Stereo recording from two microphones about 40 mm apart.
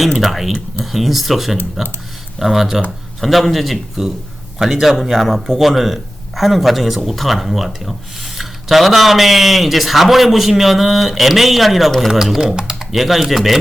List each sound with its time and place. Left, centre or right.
0.2 s speech: centre
12.5 s typing: centre
12.9 s speech: centre